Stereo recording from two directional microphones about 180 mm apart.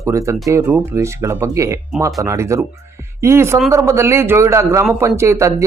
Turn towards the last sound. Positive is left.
turn(degrees=-15)  # may be behind; listen again after turning